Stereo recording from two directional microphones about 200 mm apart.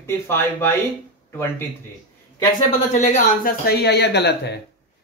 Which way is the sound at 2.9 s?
35° left (ahead or behind).